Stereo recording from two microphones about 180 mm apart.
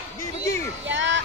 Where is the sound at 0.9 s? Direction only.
90° right.